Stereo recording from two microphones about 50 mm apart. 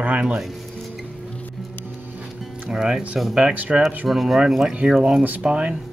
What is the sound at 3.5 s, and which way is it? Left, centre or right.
Speech, right.